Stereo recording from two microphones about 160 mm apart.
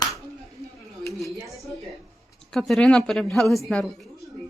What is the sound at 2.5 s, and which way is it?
Speech, centre (ahead or behind).